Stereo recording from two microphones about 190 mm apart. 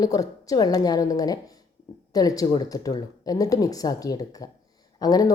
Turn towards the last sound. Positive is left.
turn(degrees=20)  # may be behind; listen again after turning